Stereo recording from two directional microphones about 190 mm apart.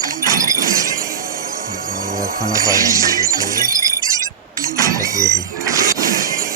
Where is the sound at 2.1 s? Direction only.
15° right (ahead or behind).